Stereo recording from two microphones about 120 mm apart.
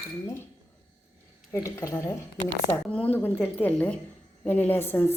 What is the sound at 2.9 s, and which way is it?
A woman's voice, 10° left (ahead or behind).